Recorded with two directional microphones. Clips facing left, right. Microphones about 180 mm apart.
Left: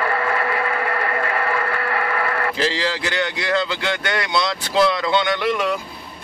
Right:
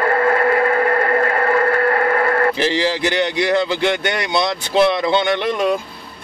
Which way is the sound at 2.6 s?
25° right (ahead or behind).